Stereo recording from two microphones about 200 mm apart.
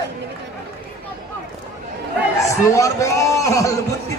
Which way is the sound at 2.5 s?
15° left (ahead or behind).